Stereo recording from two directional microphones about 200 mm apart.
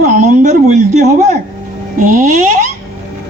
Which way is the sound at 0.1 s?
35° right (ahead or behind).